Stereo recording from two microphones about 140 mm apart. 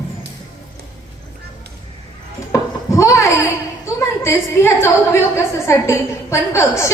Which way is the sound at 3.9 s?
20° left (ahead or behind).